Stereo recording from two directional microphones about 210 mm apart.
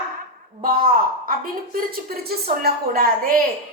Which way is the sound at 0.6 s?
45° right (ahead or behind).